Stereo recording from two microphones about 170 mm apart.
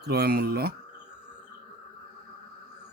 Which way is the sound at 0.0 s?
70° right (ahead or behind).